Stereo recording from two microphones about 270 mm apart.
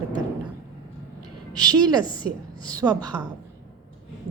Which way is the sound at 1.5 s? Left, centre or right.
Centre.